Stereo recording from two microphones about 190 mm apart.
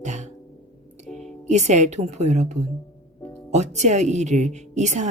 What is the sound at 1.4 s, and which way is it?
Speech, 40° right (ahead or behind).